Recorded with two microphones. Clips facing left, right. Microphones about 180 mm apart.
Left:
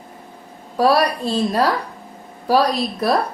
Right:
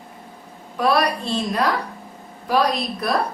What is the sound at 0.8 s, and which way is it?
A woman's voice, 35° left (ahead or behind).